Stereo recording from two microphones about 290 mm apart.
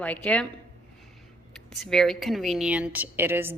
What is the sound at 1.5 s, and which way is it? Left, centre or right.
Speech, centre.